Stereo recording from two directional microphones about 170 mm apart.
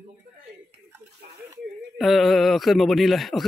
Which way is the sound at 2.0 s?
Centre (ahead or behind).